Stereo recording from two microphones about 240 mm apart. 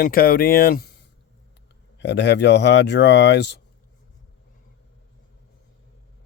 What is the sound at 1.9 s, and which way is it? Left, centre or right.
A man's voice, left.